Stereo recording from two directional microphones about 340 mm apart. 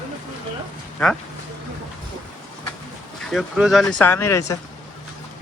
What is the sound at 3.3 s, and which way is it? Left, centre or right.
Speech, centre.